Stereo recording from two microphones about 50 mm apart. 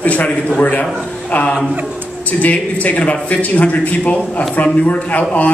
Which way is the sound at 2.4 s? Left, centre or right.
Left.